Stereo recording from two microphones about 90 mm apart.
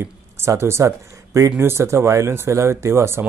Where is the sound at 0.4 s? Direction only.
30° right (ahead or behind).